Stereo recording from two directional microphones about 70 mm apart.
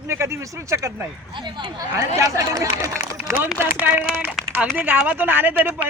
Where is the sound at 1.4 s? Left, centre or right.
Right.